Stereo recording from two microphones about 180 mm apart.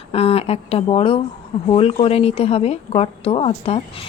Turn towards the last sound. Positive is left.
turn(degrees=35)  # may be behind; listen again after turning